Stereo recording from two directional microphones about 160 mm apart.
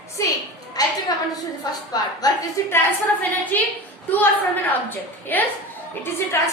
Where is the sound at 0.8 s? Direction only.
25° left (ahead or behind).